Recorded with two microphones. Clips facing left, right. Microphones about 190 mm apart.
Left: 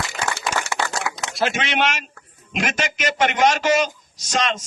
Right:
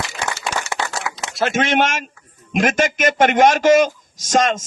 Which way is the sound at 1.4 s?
50° right (ahead or behind).